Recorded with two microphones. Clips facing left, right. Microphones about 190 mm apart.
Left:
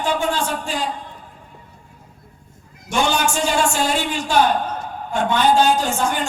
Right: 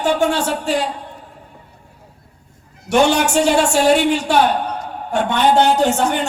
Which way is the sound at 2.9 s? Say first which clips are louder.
Right 6 dB; 65° right (ahead or behind).